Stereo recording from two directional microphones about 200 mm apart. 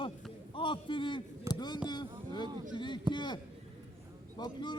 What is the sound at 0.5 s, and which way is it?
A man's voice, 25° left (ahead or behind).